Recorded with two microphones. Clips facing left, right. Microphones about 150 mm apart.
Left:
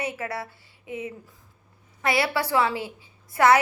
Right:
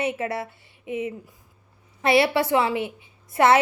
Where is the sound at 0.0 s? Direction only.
25° right (ahead or behind).